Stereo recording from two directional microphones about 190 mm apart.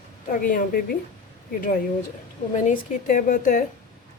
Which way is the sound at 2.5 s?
40° left (ahead or behind).